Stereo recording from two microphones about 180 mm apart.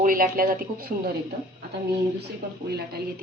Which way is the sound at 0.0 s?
50° right (ahead or behind).